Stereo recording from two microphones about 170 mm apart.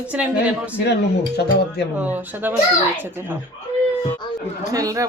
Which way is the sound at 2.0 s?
10° right (ahead or behind).